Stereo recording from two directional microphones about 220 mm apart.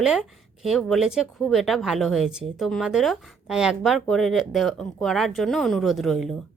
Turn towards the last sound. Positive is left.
turn(degrees=0)  # may be behind; listen again after turning